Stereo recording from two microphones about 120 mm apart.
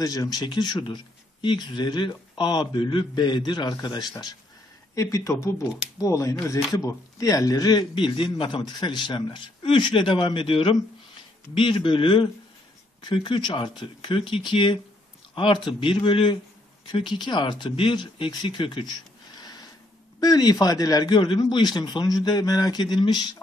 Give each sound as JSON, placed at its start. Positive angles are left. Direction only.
{"t": 0.0, "sound": "speech", "side_deg": 30}
{"t": 4.9, "sound": "speech", "side_deg": 25}
{"t": 7.9, "sound": "a man's voice", "side_deg": 45}
{"t": 20.2, "sound": "speech", "side_deg": 30}